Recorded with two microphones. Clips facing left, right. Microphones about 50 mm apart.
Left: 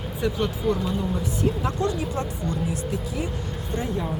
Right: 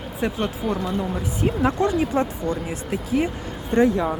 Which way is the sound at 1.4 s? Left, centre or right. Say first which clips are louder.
Right 2 dB; right.